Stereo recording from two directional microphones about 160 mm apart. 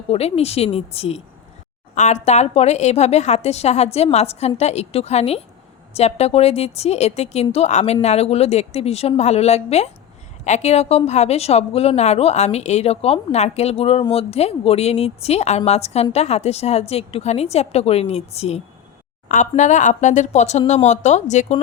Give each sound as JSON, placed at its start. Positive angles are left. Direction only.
{"t": 0.1, "sound": "a woman's voice", "side_deg": 40}